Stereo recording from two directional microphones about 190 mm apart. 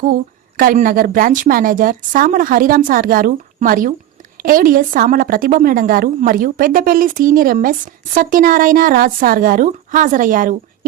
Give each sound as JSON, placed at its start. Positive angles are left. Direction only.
{"t": 0.0, "sound": "a woman's voice", "side_deg": -45}